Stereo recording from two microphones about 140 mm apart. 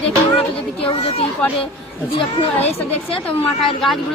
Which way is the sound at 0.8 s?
40° left (ahead or behind).